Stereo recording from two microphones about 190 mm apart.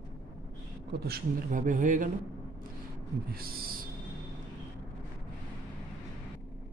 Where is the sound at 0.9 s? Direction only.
55° right (ahead or behind).